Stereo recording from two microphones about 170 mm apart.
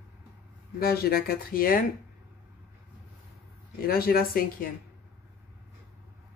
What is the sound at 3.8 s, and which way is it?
Speech, 60° left (ahead or behind).